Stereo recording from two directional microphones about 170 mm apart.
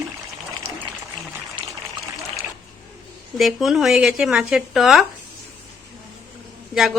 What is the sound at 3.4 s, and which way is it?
A woman's voice, centre (ahead or behind).